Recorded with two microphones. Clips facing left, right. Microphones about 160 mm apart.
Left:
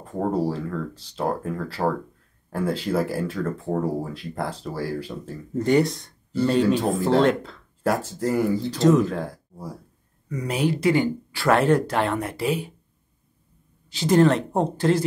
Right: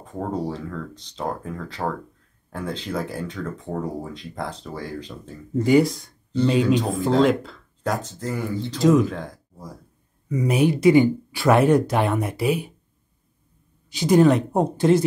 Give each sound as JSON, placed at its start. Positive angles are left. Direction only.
{"t": 0.0, "sound": "speech", "side_deg": 0}
{"t": 8.7, "sound": "speech", "side_deg": -5}
{"t": 9.1, "sound": "speech", "side_deg": 10}
{"t": 10.2, "sound": "speech", "side_deg": -15}
{"t": 13.8, "sound": "speech", "side_deg": -15}